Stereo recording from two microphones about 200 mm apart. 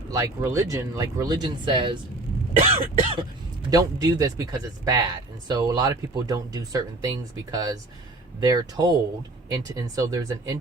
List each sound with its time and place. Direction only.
0.1 s speech: 15° right (ahead or behind); by 3.2 s 30° right (ahead or behind)
3.7 s speech: 20° right (ahead or behind)